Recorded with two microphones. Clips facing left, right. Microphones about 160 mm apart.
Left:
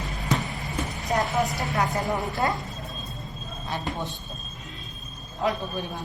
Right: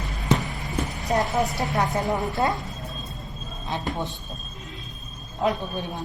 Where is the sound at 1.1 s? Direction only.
20° right (ahead or behind).